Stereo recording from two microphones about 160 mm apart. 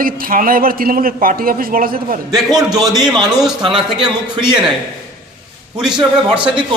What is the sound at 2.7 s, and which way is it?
Speech, centre (ahead or behind).